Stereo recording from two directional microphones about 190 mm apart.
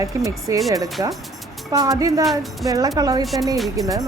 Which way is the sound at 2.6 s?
20° right (ahead or behind).